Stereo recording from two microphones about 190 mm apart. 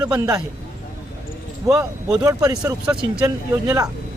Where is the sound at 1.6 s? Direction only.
15° right (ahead or behind).